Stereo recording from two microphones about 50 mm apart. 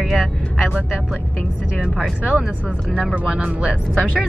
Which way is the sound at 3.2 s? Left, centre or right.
Centre.